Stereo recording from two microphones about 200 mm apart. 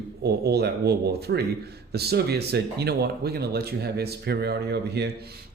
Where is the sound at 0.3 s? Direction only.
55° right (ahead or behind).